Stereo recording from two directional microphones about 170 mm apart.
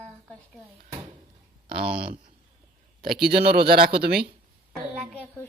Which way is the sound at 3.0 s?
65° right (ahead or behind).